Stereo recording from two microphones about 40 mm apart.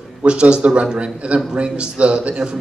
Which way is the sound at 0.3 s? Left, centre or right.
Right.